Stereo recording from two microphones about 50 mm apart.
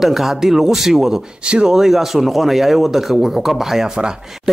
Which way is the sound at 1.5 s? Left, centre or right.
Centre.